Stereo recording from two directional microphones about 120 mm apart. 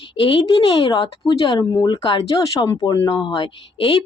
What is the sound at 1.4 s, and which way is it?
Speech, 30° left (ahead or behind).